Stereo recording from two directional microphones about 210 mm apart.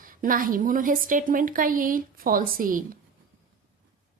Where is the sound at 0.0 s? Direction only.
40° right (ahead or behind).